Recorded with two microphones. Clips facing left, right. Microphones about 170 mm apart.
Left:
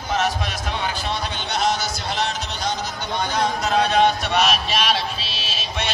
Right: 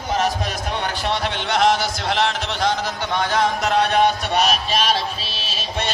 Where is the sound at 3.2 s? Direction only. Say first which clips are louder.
Right 2 dB; 90° right.